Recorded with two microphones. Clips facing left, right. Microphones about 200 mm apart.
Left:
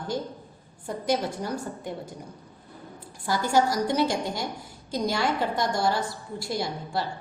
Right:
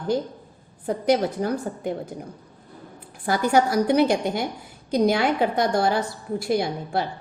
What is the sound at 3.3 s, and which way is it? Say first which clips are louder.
A woman's voice: right 3 dB; 60° right (ahead or behind).